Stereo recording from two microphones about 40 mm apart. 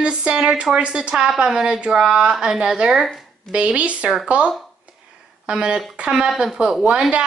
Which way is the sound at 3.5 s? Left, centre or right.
Right.